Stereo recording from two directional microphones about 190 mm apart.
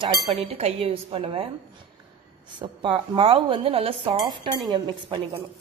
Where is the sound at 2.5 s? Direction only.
25° right (ahead or behind).